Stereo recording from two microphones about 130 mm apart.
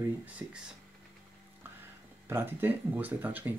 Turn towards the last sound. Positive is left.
turn(degrees=-15)  # may be behind; listen again after turning